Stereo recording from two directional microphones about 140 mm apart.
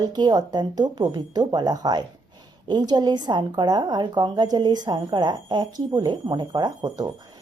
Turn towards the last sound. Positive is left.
turn(degrees=-30)  # may be behind; listen again after turning